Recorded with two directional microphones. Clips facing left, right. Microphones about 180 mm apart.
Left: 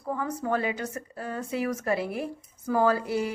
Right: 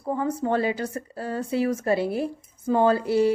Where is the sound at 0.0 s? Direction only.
30° right (ahead or behind).